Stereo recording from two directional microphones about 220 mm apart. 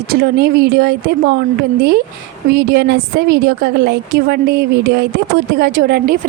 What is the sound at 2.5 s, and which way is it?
A woman's voice, 45° right (ahead or behind).